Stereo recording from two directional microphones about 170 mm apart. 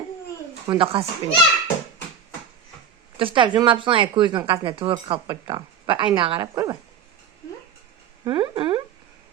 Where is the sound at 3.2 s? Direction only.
30° right (ahead or behind).